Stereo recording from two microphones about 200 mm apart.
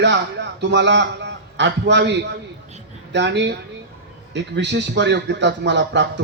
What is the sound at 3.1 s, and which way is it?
Speech, 60° right (ahead or behind).